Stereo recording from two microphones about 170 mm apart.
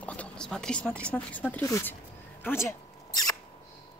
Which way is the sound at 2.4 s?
15° left (ahead or behind).